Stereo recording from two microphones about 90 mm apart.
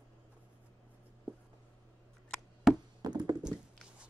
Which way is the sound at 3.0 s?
50° right (ahead or behind).